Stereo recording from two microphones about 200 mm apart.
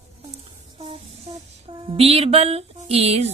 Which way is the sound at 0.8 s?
30° right (ahead or behind).